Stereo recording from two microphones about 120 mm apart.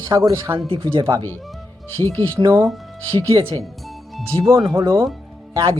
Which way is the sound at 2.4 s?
35° right (ahead or behind).